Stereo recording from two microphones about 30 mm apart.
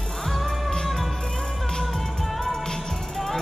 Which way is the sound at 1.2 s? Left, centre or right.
Centre.